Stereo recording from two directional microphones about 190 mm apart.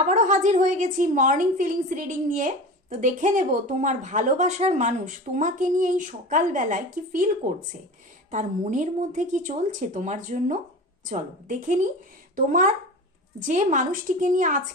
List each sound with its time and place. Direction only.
0.1 s a woman's voice: 40° right (ahead or behind)